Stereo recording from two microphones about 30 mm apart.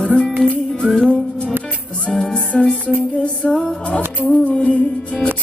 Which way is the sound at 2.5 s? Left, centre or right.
Left.